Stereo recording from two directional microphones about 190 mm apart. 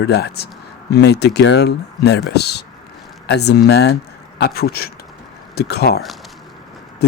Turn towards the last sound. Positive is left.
turn(degrees=60)  # may be behind; listen again after turning